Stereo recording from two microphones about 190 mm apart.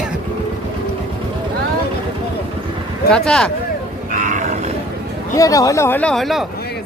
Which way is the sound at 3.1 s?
5° left (ahead or behind).